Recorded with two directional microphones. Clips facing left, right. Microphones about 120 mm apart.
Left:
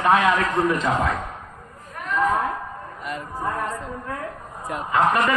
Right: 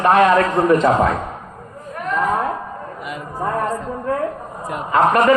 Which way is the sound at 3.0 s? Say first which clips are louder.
Left 1 dB; 5° right (ahead or behind).